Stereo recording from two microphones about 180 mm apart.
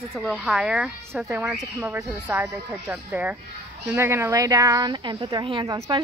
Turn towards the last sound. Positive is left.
turn(degrees=-25)  # may be behind; listen again after turning